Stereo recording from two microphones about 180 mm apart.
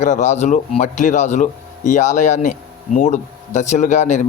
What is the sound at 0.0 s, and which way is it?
Speech, 40° left (ahead or behind).